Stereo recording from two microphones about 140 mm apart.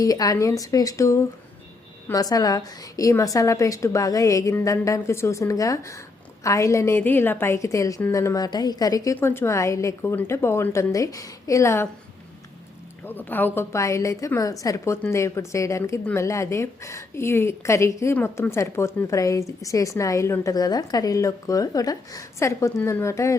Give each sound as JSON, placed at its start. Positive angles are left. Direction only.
{"t": 0.0, "sound": "a woman's voice", "side_deg": 25}
{"t": 13.1, "sound": "a woman's voice", "side_deg": 15}